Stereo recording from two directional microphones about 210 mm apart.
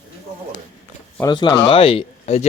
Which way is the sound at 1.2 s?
20° left (ahead or behind).